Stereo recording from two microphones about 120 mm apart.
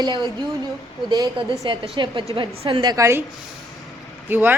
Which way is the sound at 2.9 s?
25° right (ahead or behind).